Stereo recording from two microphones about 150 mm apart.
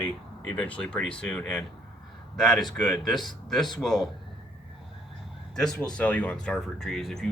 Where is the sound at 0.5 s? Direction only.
10° left (ahead or behind).